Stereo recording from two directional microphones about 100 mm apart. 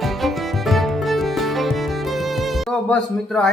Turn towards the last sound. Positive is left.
turn(degrees=5)  # may be behind; listen again after turning